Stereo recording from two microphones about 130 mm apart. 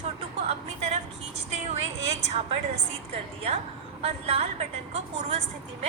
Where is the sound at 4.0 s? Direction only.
50° right (ahead or behind).